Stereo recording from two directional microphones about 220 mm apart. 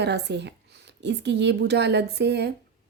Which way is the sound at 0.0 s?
50° right (ahead or behind).